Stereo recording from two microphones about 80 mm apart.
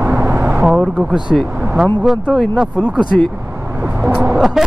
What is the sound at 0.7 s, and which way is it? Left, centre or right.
Speech, centre.